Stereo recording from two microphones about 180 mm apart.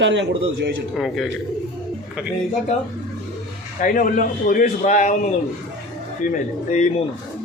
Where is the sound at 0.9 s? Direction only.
Centre (ahead or behind).